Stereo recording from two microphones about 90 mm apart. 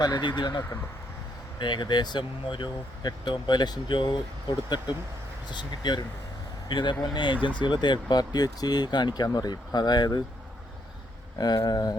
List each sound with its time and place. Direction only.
0.0 s speech: 55° left (ahead or behind)
5.5 s speech: 55° left (ahead or behind)
11.3 s speech: 50° left (ahead or behind)